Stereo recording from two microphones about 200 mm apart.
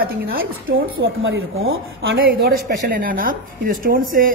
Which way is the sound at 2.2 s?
50° right (ahead or behind).